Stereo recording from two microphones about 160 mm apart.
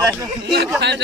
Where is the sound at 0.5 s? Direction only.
90° right.